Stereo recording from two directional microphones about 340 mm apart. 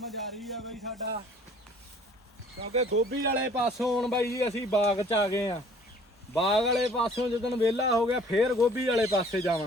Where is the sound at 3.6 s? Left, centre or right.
Centre.